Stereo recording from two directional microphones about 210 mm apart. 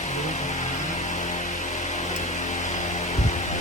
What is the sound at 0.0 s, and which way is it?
Music, 35° left (ahead or behind).